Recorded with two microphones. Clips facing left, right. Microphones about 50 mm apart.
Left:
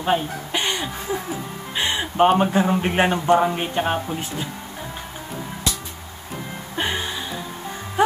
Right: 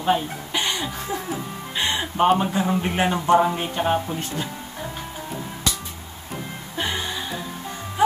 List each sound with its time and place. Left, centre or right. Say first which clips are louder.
0.0 s speech: even; centre
0.6 s music: even; centre
2.3 s speech: left 3 dB; left
3.3 s speech: even; centre
6.8 s music: left 1 dB; centre